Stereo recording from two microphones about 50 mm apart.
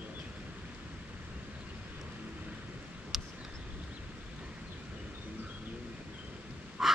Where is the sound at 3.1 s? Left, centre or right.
Centre.